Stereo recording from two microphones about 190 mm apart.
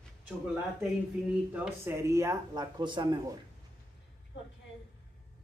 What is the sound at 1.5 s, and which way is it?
Speech, 5° right (ahead or behind).